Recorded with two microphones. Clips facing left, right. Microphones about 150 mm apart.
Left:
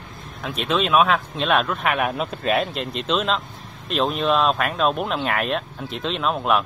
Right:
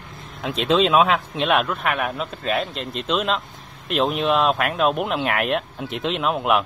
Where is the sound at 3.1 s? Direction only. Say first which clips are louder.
Even; 5° right (ahead or behind).